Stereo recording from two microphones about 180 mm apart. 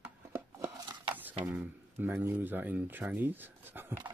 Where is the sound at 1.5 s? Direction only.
10° right (ahead or behind).